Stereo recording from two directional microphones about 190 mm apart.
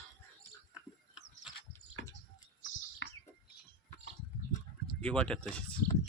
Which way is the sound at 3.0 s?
80° left.